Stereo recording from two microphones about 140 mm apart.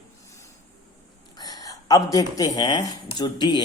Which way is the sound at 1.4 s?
25° left (ahead or behind).